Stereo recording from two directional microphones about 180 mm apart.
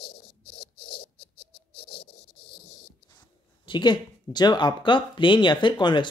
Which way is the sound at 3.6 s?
25° left (ahead or behind).